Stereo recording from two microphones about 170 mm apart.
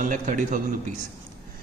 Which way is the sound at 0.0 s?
50° right (ahead or behind).